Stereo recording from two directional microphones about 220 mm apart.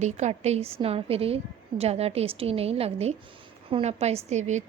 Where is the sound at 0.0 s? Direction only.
30° right (ahead or behind).